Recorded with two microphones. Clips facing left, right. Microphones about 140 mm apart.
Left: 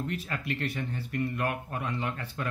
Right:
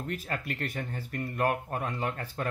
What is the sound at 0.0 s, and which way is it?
Speech, 45° right (ahead or behind).